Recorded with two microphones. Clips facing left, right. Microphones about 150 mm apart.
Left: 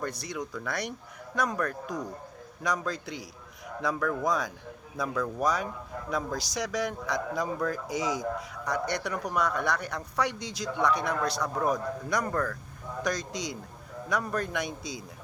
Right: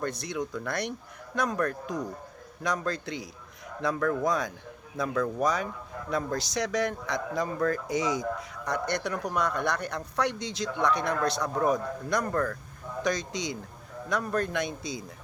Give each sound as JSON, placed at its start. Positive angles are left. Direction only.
{"t": 0.0, "sound": "speech", "side_deg": 5}